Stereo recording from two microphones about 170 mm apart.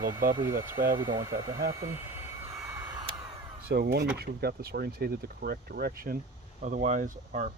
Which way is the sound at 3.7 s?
70° right (ahead or behind).